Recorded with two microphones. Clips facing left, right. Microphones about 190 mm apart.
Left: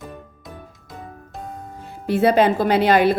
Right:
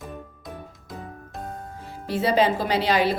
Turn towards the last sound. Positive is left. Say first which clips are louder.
# left 6 dB
turn(degrees=55)  # may be behind; listen again after turning